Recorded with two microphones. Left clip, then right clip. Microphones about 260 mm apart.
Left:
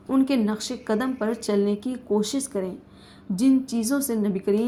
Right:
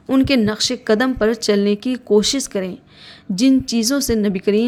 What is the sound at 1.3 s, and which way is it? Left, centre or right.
Speech, right.